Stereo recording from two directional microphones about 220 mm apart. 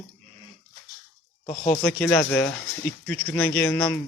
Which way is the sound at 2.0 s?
5° left (ahead or behind).